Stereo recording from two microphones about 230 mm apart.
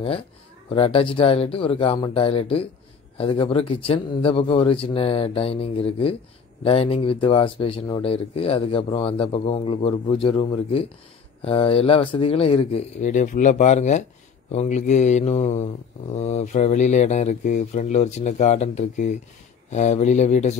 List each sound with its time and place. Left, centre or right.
0.7 s mantra: left